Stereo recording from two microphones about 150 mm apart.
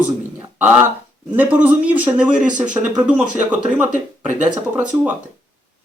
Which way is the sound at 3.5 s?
10° right (ahead or behind).